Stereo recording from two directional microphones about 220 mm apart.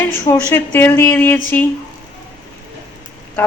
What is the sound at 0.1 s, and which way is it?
A woman's voice, 10° left (ahead or behind).